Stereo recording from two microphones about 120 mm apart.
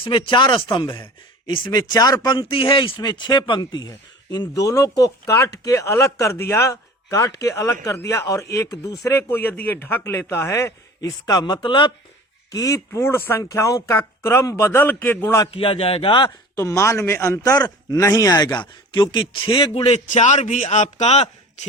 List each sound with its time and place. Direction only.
0.0 s speech: 45° left (ahead or behind)
12.5 s speech: 25° left (ahead or behind)
15.5 s speech: 50° left (ahead or behind)
16.6 s speech: 25° left (ahead or behind); by 21.7 s 65° left (ahead or behind)